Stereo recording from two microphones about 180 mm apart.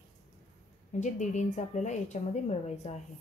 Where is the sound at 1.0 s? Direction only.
40° left (ahead or behind).